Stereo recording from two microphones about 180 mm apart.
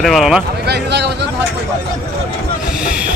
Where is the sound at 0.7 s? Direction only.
70° right (ahead or behind).